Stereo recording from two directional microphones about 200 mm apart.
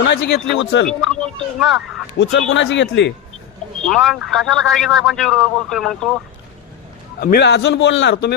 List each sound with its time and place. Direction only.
0.0 s a man's voice: 60° left (ahead or behind)
0.9 s speech: 5° left (ahead or behind)
2.5 s a man's voice: 65° left (ahead or behind)
3.8 s a man's voice: 5° left (ahead or behind)
7.2 s a man's voice: 50° left (ahead or behind)